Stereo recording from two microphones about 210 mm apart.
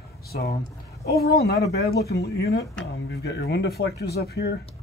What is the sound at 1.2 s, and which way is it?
Speech, 50° left (ahead or behind).